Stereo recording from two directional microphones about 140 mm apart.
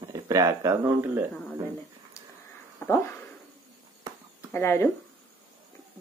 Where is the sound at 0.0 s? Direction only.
25° right (ahead or behind).